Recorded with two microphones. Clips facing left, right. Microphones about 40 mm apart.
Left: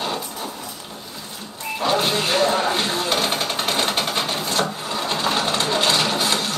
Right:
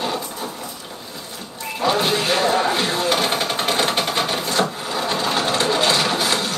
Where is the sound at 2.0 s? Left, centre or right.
Centre.